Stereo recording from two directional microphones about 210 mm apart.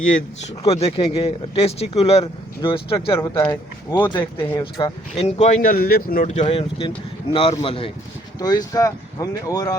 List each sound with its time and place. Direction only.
0.6 s speech: 30° left (ahead or behind)
3.2 s speech: 15° left (ahead or behind)
4.0 s speech: 20° left (ahead or behind)
5.6 s speech: 45° left (ahead or behind); by 9.7 s 15° left (ahead or behind)